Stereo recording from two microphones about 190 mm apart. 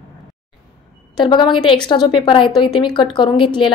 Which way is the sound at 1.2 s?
25° left (ahead or behind).